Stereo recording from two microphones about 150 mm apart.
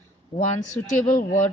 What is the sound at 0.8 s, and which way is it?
Speech, 55° left (ahead or behind).